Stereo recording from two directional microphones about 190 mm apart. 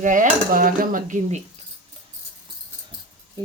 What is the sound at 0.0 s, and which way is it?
Dishes, 40° right (ahead or behind).